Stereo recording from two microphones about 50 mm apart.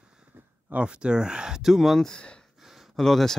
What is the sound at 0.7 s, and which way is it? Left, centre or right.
Speech, centre.